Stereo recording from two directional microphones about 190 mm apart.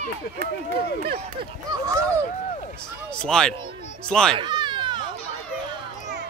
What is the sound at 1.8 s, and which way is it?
Speech, 15° right (ahead or behind).